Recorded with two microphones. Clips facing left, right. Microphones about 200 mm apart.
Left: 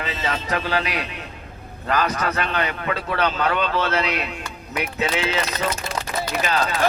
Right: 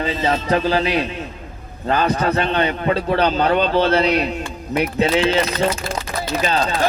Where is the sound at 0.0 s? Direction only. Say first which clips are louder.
Right 7 dB; 30° right (ahead or behind).